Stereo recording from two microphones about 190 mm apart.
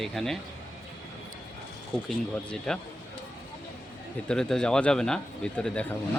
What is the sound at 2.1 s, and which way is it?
Speech, 5° left (ahead or behind).